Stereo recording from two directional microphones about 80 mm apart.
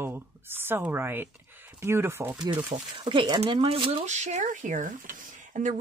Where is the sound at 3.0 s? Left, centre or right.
Right.